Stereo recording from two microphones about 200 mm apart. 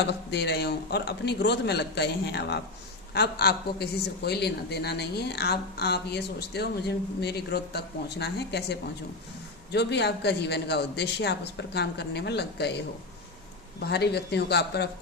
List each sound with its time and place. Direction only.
0.0 s a man's voice: 55° left (ahead or behind)
13.8 s a man's voice: 55° left (ahead or behind)